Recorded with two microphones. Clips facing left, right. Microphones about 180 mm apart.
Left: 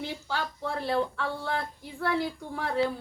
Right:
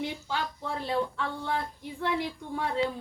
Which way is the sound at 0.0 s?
15° right (ahead or behind).